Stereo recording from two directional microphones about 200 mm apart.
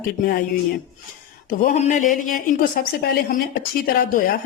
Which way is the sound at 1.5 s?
40° left (ahead or behind).